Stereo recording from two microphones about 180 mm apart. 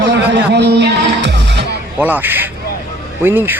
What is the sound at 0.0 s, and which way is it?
Music, 75° right (ahead or behind).